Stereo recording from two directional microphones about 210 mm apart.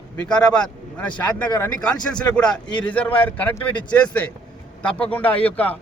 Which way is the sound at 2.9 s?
10° left (ahead or behind).